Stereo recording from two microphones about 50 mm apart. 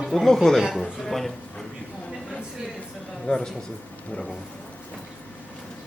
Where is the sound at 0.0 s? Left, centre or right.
Centre.